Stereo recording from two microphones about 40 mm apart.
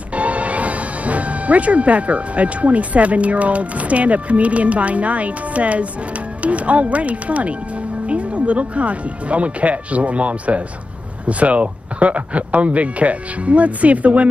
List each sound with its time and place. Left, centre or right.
0.1 s speech: right